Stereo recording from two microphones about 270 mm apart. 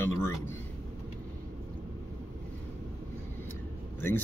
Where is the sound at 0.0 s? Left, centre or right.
Centre.